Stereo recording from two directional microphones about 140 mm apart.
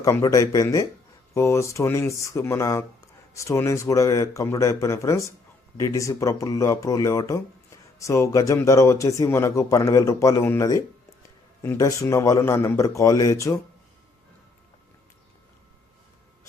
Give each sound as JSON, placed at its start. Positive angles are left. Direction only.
{"t": 0.0, "sound": "speech", "side_deg": 25}